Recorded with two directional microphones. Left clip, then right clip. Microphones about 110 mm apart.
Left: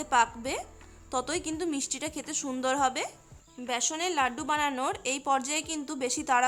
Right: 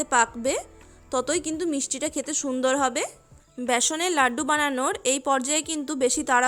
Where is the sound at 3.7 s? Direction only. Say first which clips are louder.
Right 7 dB; 55° right (ahead or behind).